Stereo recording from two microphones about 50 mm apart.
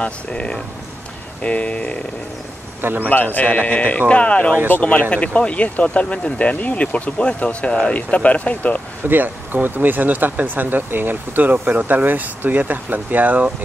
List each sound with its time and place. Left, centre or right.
0.0 s speech: left
2.8 s a man's voice: right
3.1 s speech: left
9.0 s speech: right